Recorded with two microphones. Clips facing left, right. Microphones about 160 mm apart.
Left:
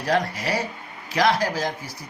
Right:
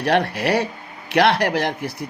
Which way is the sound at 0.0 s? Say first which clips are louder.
Right 4 dB; 65° right (ahead or behind).